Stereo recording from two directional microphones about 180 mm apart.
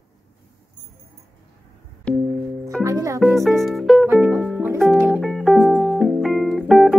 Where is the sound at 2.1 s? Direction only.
5° left (ahead or behind).